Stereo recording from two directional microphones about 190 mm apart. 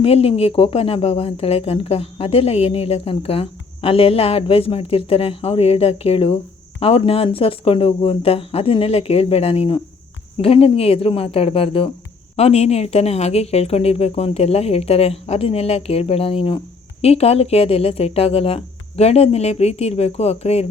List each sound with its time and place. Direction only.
0.0 s speech: 30° left (ahead or behind)